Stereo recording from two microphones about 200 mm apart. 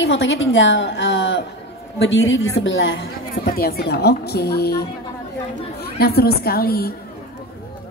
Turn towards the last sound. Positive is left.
turn(degrees=50)  # may be behind; listen again after turning